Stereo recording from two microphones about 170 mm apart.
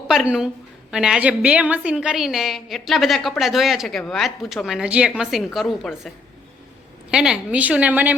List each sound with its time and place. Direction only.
0.1 s a woman's voice: centre (ahead or behind)
7.1 s a woman's voice: 5° right (ahead or behind)